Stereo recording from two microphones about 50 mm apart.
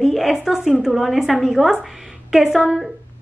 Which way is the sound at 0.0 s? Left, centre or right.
Centre.